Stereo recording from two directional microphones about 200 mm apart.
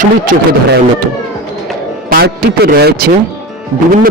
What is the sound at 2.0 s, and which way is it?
A man's voice, 50° right (ahead or behind).